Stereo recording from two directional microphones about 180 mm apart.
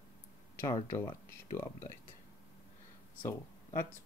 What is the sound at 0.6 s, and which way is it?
Speech, 15° left (ahead or behind).